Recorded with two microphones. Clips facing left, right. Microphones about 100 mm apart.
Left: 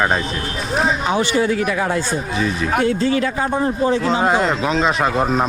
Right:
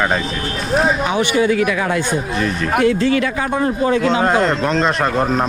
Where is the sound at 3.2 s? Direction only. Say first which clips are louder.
Right 1 dB; 75° right (ahead or behind).